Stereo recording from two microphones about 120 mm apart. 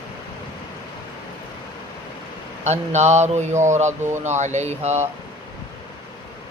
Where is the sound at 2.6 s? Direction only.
70° right (ahead or behind).